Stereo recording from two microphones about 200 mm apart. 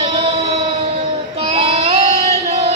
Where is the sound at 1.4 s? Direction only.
30° right (ahead or behind).